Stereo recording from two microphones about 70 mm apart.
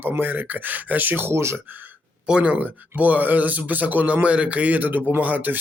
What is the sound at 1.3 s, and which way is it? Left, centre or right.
Speech, right.